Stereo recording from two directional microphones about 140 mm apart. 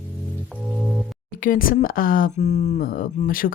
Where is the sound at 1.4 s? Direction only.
85° left.